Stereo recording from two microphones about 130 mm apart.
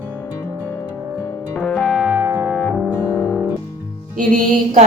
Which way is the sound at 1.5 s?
5° right (ahead or behind).